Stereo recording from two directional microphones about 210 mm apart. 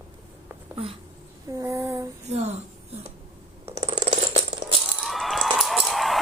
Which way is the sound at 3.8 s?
30° right (ahead or behind).